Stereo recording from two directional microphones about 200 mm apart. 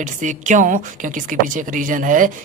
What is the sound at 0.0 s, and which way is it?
A woman's voice, 40° right (ahead or behind).